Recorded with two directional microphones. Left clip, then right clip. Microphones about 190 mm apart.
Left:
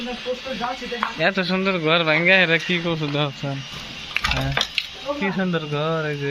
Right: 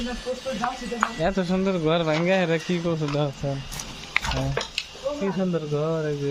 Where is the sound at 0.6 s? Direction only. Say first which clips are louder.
Left 1 dB; centre (ahead or behind).